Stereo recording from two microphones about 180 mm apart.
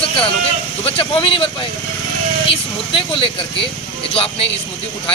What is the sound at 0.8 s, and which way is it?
Speech, 30° left (ahead or behind).